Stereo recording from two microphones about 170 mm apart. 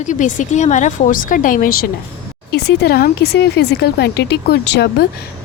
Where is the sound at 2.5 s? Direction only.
75° left (ahead or behind).